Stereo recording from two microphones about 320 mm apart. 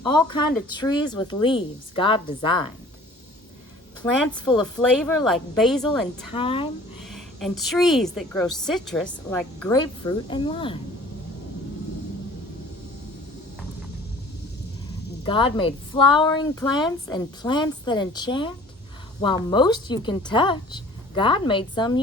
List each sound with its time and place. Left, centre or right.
0.1 s a woman's voice: centre
4.3 s a woman's voice: centre
4.6 s a woman's voice: centre
6.3 s a woman's voice: centre
7.1 s a woman's voice: centre
9.8 s a woman's voice: centre
15.2 s a woman's voice: centre